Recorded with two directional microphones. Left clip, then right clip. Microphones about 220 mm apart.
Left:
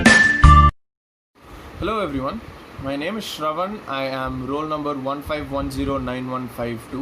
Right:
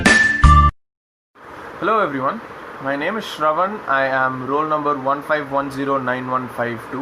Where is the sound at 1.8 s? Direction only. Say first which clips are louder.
Right 6 dB; 35° left (ahead or behind).